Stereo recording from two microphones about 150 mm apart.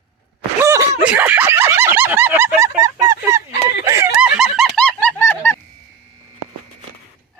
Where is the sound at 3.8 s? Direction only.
20° right (ahead or behind).